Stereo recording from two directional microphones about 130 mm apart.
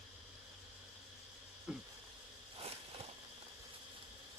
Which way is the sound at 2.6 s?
55° right (ahead or behind).